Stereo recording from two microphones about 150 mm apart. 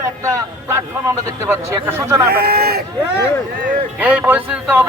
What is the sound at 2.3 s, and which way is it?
Speech, 90° right.